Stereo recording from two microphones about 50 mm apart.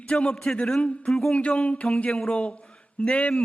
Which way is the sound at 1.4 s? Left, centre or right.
Left.